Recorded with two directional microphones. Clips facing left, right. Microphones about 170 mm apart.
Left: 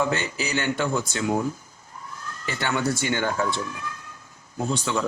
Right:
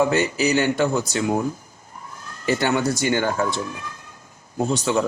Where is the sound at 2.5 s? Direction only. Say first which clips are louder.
Right 5 dB; 40° right (ahead or behind).